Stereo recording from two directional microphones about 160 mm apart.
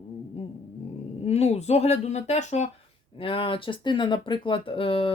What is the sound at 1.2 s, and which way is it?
Speech, 40° left (ahead or behind).